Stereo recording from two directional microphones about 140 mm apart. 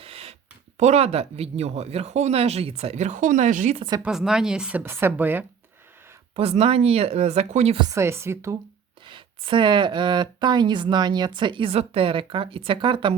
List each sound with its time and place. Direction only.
0.0 s a sound: 45° right (ahead or behind)
0.8 s speech: 50° right (ahead or behind)
4.0 s a woman's voice: 5° right (ahead or behind)
6.3 s speech: 45° right (ahead or behind)
7.8 s a woman's voice: 25° right (ahead or behind)
9.0 s speech: 35° right (ahead or behind)